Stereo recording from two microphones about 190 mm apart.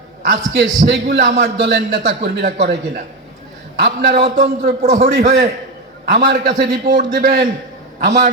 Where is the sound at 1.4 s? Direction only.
65° right (ahead or behind).